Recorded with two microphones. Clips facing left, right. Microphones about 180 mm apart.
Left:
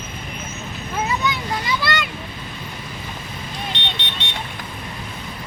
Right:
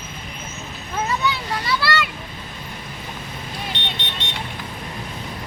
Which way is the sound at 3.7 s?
50° right (ahead or behind).